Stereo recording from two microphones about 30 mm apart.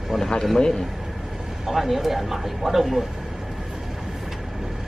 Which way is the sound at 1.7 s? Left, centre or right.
Centre.